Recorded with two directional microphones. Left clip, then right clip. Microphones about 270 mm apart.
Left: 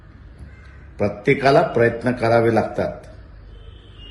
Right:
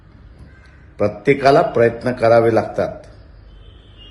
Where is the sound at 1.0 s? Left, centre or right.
Centre.